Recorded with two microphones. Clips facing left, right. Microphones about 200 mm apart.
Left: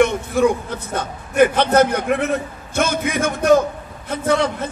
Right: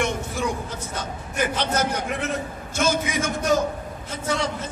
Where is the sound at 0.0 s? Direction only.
60° left (ahead or behind).